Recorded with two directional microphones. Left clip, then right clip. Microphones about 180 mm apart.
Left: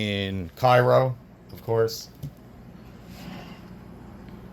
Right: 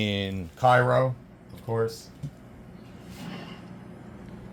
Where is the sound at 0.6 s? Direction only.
40° left (ahead or behind).